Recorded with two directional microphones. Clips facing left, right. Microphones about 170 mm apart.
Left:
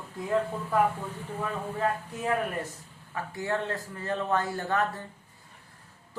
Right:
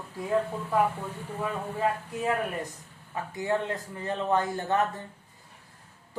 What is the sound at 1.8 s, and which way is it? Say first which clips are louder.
Speech: right 2 dB; 10° right (ahead or behind).